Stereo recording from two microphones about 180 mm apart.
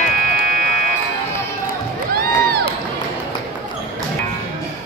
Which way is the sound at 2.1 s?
60° right (ahead or behind).